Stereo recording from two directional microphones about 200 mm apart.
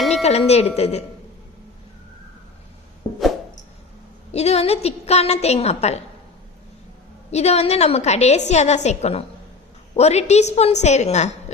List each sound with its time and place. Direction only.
0.1 s speech: 30° left (ahead or behind)
4.3 s a woman's voice: 30° left (ahead or behind)
7.3 s a woman's voice: 35° left (ahead or behind)